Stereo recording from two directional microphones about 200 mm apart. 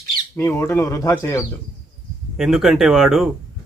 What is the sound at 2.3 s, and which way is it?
Speech, centre (ahead or behind).